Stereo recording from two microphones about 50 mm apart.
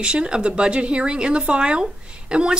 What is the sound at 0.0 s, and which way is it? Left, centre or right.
Speech, centre.